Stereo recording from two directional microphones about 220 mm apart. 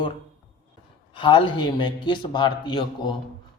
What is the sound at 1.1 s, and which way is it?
A man's voice, 20° left (ahead or behind).